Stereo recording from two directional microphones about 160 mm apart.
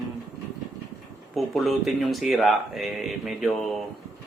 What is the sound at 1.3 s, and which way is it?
Music, centre (ahead or behind).